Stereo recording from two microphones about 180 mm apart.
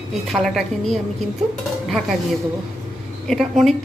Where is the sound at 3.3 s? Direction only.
Centre (ahead or behind).